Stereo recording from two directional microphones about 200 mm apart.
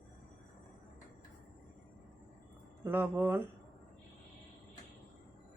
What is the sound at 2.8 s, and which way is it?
Speech, 10° right (ahead or behind).